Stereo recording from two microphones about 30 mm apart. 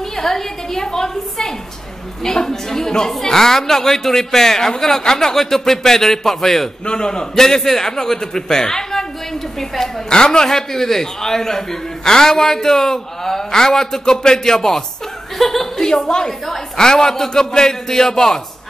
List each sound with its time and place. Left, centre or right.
0.2 s a man's voice: centre
6.9 s a man's voice: left
7.3 s a man's voice: centre
10.0 s a man's voice: left
15.3 s a man's voice: centre